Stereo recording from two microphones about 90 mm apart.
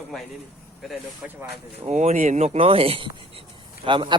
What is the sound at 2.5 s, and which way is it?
Speech, 90° right.